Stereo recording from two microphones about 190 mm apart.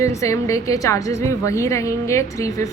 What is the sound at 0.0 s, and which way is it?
A woman's voice, 15° left (ahead or behind).